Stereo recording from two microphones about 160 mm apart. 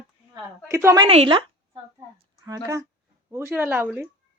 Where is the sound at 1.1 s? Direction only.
35° right (ahead or behind).